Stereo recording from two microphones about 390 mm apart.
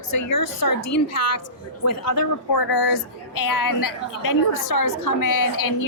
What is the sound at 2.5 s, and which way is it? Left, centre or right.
A woman's voice, left.